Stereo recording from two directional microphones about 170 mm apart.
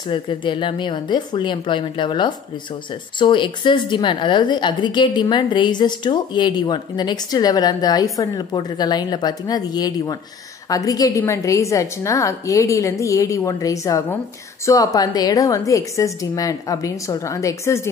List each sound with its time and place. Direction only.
0.0 s a woman's voice: 30° left (ahead or behind)